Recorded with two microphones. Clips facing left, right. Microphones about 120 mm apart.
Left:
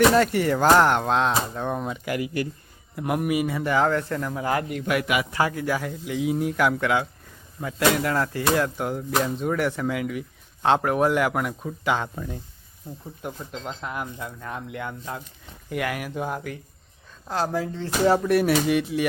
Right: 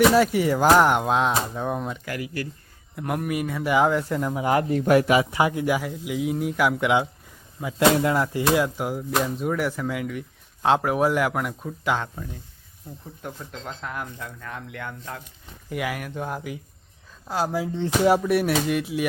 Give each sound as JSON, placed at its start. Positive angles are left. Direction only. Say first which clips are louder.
{"t": 0.0, "sound": "speech", "louder": "right 1 dB", "side_deg": -5}
{"t": 2.0, "sound": "speech", "louder": "left 4 dB", "side_deg": 20}
{"t": 2.9, "sound": "speech", "louder": "left 3 dB", "side_deg": 5}
{"t": 3.7, "sound": "speech", "louder": "right 3 dB", "side_deg": -10}
{"t": 4.7, "sound": "speech", "louder": "right 6 dB", "side_deg": -35}
{"t": 5.2, "sound": "speech", "louder": "right 2 dB", "side_deg": -20}
{"t": 6.8, "sound": "speech", "louder": "right 2 dB", "side_deg": -20}
{"t": 13.2, "sound": "speech", "louder": "left 2 dB", "side_deg": 10}
{"t": 15.7, "sound": "speech", "louder": "left 1 dB", "side_deg": 0}
{"t": 18.2, "sound": "speech", "louder": "left 1 dB", "side_deg": 0}